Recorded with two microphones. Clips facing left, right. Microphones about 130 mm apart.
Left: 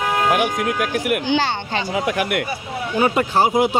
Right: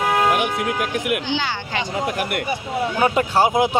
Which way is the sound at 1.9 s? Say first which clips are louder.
Left 4 dB; 65° left (ahead or behind).